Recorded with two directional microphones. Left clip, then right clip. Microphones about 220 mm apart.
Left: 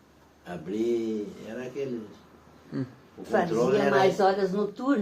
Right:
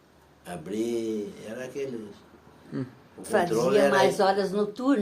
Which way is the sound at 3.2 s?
50° right (ahead or behind).